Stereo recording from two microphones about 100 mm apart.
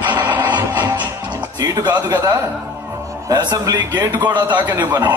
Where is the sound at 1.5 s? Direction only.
40° right (ahead or behind).